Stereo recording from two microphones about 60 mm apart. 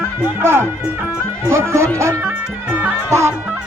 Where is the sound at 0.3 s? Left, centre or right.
Right.